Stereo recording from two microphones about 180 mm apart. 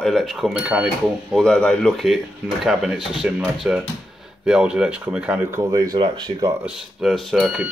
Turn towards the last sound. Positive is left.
turn(degrees=0)  # may be behind; listen again after turning